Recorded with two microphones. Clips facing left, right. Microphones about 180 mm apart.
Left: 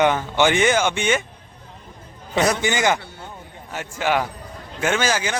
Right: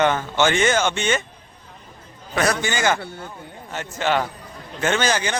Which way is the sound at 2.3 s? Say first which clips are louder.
Left 2 dB; 20° left (ahead or behind).